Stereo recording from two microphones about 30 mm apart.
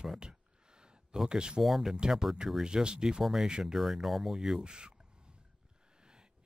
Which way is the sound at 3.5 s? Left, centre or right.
Right.